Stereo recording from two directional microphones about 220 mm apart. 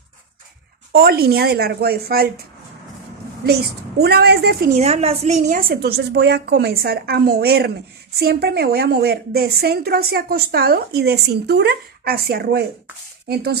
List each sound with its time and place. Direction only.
0.9 s a woman's voice: 45° right (ahead or behind)
3.4 s a woman's voice: 45° right (ahead or behind)
4.7 s a woman's voice: 30° right (ahead or behind); by 13.6 s 45° right (ahead or behind)